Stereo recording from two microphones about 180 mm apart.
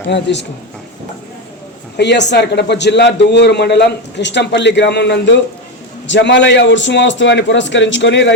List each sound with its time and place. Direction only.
0.1 s a man's voice: 75° left (ahead or behind)
2.0 s a man's voice: 75° left (ahead or behind)